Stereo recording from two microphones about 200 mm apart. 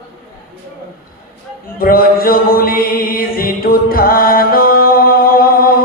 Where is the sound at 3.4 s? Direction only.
45° left (ahead or behind).